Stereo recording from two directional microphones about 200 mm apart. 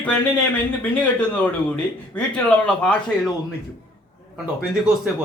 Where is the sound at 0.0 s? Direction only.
10° left (ahead or behind).